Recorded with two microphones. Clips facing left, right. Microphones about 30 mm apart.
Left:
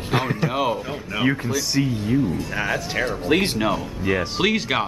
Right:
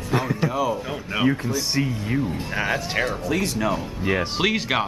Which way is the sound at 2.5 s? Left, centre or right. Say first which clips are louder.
Even; centre.